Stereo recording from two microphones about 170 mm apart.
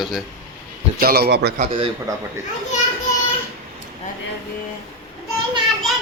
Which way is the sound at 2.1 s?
20° right (ahead or behind).